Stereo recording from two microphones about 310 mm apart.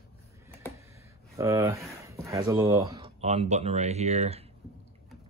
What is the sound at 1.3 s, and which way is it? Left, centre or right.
Speech, centre.